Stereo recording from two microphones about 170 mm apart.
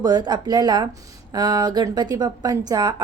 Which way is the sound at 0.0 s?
25° right (ahead or behind).